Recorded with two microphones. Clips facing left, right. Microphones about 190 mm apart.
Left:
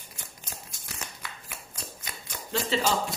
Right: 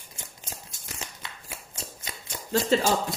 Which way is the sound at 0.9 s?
25° right (ahead or behind).